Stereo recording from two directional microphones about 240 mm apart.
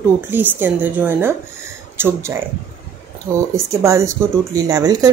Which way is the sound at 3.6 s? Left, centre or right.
Centre.